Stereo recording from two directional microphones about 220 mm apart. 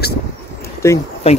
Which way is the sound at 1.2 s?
25° left (ahead or behind).